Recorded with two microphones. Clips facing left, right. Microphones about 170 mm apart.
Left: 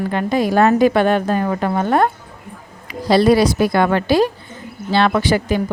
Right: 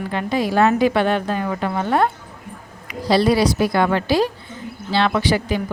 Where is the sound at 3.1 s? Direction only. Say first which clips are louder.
Left 3 dB; 50° left (ahead or behind).